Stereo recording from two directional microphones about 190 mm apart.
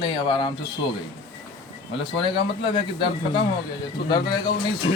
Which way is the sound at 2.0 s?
25° left (ahead or behind).